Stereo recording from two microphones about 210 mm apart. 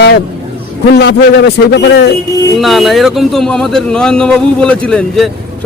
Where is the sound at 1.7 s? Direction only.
55° left (ahead or behind).